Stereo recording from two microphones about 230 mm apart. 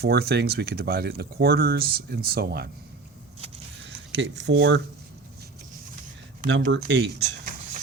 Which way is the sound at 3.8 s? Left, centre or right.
Right.